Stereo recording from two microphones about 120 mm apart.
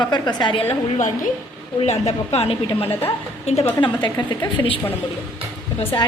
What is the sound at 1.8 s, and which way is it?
A woman's voice, 65° left (ahead or behind).